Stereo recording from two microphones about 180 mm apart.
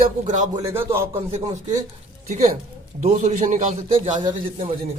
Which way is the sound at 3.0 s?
45° right (ahead or behind).